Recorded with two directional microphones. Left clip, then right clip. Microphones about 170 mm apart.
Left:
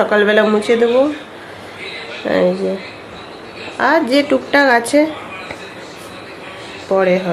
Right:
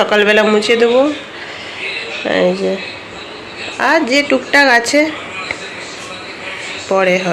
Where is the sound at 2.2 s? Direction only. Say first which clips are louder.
Right 1 dB; 5° left (ahead or behind).